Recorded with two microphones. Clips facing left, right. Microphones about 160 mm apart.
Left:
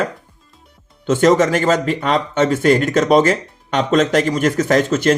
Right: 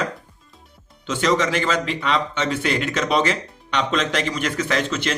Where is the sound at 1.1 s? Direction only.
45° left (ahead or behind).